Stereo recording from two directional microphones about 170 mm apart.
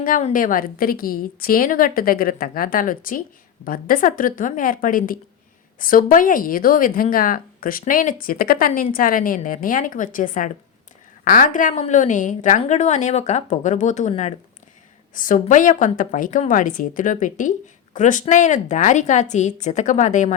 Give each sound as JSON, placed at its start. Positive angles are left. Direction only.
{"t": 0.0, "sound": "a woman's voice", "side_deg": 45}
{"t": 15.1, "sound": "a woman's voice", "side_deg": 50}